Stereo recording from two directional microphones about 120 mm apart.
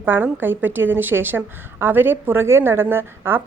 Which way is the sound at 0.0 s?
15° right (ahead or behind).